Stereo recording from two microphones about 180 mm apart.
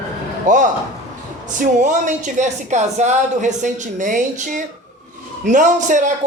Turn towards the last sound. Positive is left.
turn(degrees=-45)  # may be behind; listen again after turning